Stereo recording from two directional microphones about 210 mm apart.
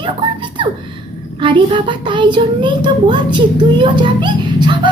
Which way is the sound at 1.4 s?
25° right (ahead or behind).